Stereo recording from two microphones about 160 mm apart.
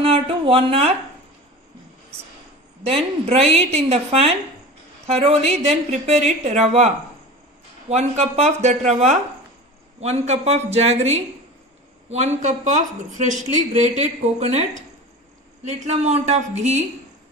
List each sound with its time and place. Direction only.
0.0 s speech: 35° right (ahead or behind)
2.8 s a woman's voice: 35° right (ahead or behind)
7.9 s a woman's voice: 40° right (ahead or behind)